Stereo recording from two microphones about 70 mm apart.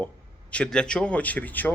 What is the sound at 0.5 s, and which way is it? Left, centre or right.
A man's voice, centre.